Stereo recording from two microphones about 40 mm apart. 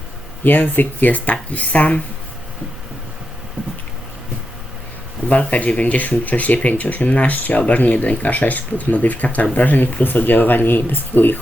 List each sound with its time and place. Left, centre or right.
0.4 s speech: left
5.3 s speech: left